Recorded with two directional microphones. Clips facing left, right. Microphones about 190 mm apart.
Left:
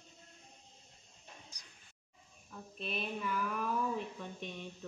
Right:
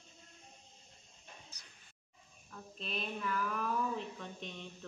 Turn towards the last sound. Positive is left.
turn(degrees=10)  # may be behind; listen again after turning